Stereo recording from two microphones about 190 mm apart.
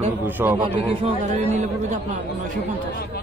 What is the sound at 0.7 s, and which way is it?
Speech, 35° right (ahead or behind).